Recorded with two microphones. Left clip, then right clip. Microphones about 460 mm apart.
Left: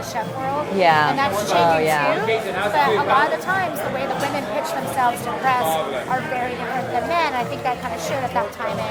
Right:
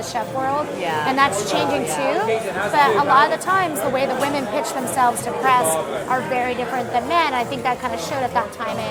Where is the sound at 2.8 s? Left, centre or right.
Right.